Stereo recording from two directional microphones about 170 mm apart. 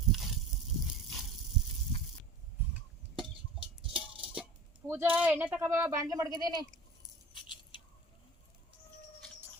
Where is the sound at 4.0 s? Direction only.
5° right (ahead or behind); by 6.6 s 25° right (ahead or behind).